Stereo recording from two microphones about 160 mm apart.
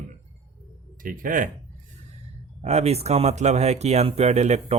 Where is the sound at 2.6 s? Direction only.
40° right (ahead or behind).